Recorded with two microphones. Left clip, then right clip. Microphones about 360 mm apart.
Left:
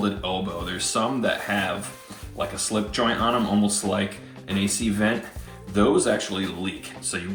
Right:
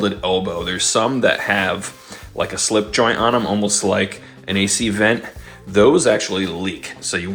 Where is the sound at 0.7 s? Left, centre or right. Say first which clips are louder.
Right 7 dB; centre.